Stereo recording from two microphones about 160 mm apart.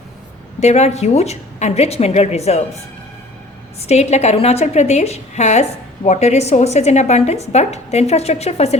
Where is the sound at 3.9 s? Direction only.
45° left (ahead or behind).